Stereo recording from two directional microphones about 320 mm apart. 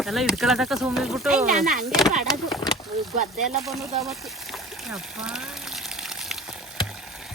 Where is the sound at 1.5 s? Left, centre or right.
Right.